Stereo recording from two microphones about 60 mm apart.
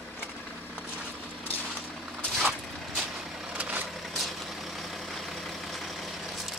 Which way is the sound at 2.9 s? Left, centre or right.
Centre.